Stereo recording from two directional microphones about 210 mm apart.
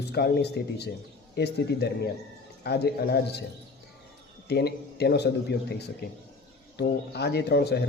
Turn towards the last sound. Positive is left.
turn(degrees=50)  # may be behind; listen again after turning